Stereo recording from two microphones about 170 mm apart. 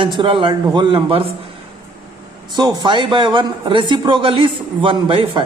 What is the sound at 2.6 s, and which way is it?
A man's voice, 25° right (ahead or behind).